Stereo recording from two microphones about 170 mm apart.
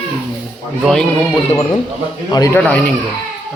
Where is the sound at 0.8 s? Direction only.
5° left (ahead or behind).